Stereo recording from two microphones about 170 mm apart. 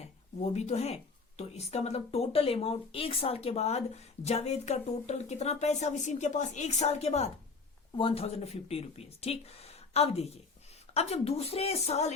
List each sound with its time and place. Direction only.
0.0 s speech: 40° left (ahead or behind)